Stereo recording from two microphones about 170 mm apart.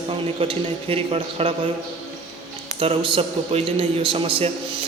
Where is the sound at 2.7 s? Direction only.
35° right (ahead or behind).